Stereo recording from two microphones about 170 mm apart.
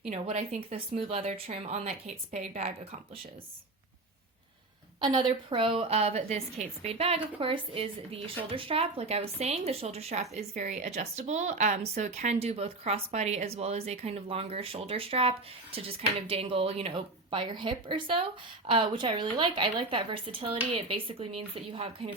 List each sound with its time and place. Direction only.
0.0 s speech: 40° right (ahead or behind)
4.9 s a woman's voice: 25° right (ahead or behind)